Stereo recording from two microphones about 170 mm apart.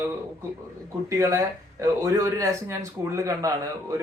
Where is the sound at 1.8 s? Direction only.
20° right (ahead or behind).